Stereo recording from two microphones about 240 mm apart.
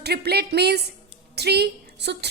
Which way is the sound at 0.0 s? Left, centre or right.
Right.